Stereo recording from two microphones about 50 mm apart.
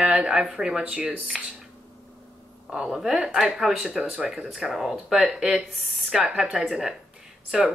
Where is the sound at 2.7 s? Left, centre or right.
Centre.